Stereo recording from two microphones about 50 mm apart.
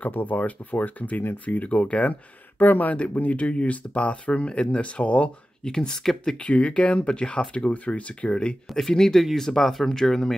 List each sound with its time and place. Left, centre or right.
0.0 s speech: left; by 6.3 s centre
6.4 s speech: left
8.7 s speech: centre